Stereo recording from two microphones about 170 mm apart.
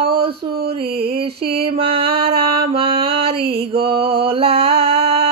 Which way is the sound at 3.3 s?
70° right (ahead or behind).